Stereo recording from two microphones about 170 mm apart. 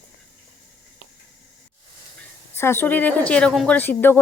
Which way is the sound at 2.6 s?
15° left (ahead or behind).